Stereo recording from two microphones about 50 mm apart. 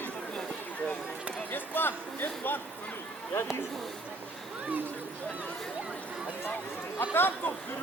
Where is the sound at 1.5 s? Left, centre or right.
Left.